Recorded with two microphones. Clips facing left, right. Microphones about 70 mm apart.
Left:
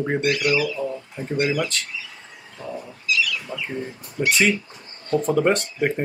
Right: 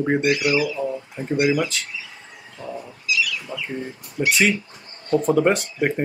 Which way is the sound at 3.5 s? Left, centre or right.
Right.